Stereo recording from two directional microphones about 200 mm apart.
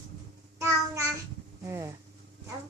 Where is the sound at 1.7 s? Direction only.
15° right (ahead or behind).